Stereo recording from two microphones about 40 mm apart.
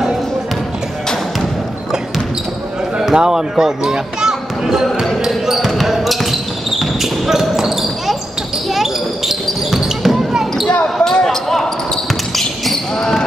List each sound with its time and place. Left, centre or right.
3.0 s speech: centre
5.7 s basketball bounce: centre
10.8 s basketball bounce: left
11.2 s basketball bounce: centre